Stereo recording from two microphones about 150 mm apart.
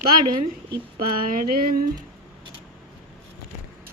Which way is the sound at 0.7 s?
80° right.